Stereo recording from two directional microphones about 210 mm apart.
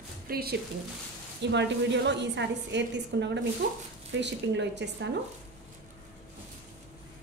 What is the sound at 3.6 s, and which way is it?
Speech, 45° right (ahead or behind).